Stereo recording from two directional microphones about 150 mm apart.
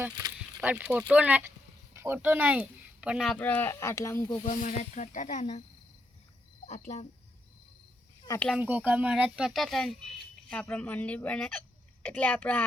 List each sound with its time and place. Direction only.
0.6 s speech: 10° right (ahead or behind)
3.3 s speech: 10° left (ahead or behind)
4.4 s speech: 55° left (ahead or behind)
6.7 s speech: 50° left (ahead or behind)
8.5 s speech: 10° right (ahead or behind); by 12.6 s 10° left (ahead or behind)